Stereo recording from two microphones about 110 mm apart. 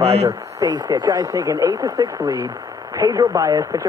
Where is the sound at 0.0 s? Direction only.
70° right (ahead or behind).